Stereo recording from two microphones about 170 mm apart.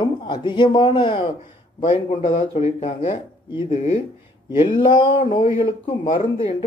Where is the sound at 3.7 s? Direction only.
40° left (ahead or behind).